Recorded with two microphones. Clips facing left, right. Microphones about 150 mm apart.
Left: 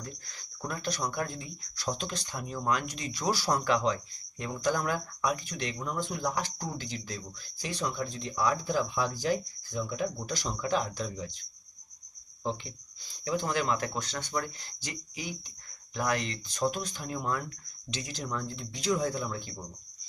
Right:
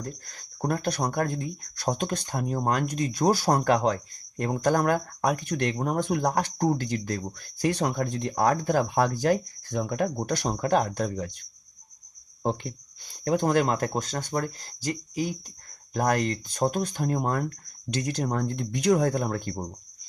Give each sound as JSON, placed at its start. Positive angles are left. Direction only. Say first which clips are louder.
{"t": 0.0, "sound": "speech", "louder": "right 7 dB", "side_deg": -45}
{"t": 12.4, "sound": "speech", "louder": "right 6 dB", "side_deg": -55}